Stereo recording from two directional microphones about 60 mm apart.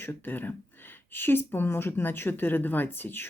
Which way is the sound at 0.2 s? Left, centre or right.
Left.